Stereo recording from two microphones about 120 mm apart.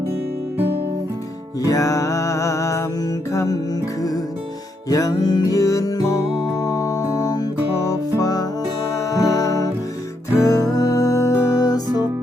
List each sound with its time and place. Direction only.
1.6 s music: 30° left (ahead or behind)
4.9 s music: 30° left (ahead or behind)